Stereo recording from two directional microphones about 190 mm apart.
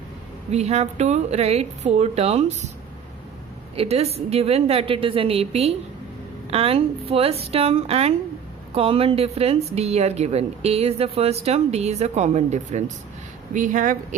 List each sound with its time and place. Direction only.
0.5 s speech: 35° right (ahead or behind)
3.8 s speech: 35° right (ahead or behind)